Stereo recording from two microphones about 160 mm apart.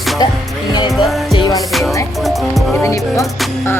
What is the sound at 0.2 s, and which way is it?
Music, 25° left (ahead or behind).